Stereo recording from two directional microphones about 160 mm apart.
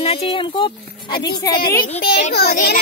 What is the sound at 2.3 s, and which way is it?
Speech, 75° left (ahead or behind).